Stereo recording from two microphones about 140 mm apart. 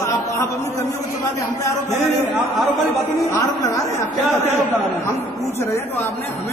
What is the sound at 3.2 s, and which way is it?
Speech, 20° left (ahead or behind).